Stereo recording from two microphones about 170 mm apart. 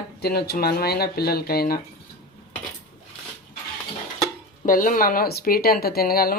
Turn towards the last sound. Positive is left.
turn(degrees=60)  # may be behind; listen again after turning